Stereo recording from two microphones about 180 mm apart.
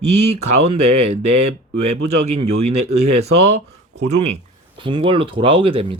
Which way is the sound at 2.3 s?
35° right (ahead or behind).